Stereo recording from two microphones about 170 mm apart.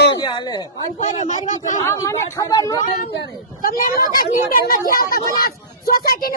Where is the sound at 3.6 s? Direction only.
55° left (ahead or behind).